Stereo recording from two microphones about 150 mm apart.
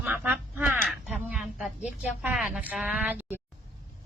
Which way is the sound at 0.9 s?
5° right (ahead or behind).